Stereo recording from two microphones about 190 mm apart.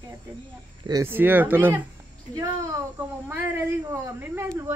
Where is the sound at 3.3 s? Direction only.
10° right (ahead or behind).